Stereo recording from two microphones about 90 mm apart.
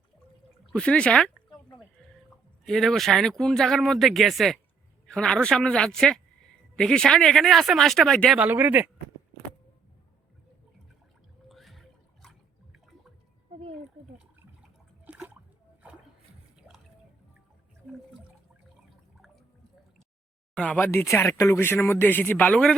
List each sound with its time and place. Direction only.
0.7 s speech: 10° left (ahead or behind)
2.6 s a man's voice: centre (ahead or behind)
8.4 s speech: 20° right (ahead or behind)
11.4 s a sound: centre (ahead or behind)
15.0 s a sound: 15° right (ahead or behind)
16.6 s drip: 5° right (ahead or behind)
20.6 s a man's voice: 15° left (ahead or behind)
20.8 s speech: 30° left (ahead or behind)